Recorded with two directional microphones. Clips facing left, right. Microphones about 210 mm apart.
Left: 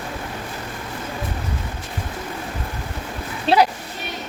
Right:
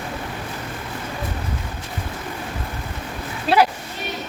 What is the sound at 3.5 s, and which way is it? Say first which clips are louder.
Speech: left 1 dB; 25° left (ahead or behind).